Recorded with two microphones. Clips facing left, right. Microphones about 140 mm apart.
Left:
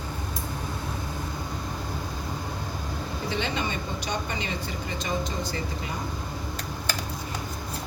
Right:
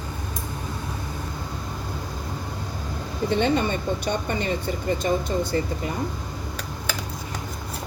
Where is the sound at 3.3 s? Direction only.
50° right (ahead or behind).